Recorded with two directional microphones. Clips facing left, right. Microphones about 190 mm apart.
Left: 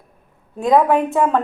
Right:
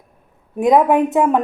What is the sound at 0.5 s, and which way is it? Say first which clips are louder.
Speech: right 2 dB; 20° right (ahead or behind).